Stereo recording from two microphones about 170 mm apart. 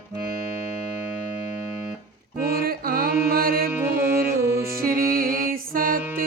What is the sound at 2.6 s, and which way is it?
Music, 60° right (ahead or behind).